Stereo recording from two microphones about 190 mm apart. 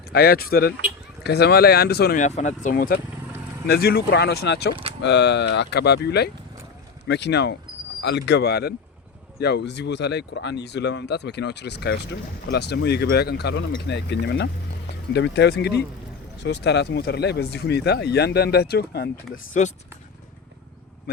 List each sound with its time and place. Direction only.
0.1 s speech: 55° left (ahead or behind)
2.2 s speech: 40° left (ahead or behind); by 19.1 s 55° left (ahead or behind)
19.3 s speech: 40° left (ahead or behind)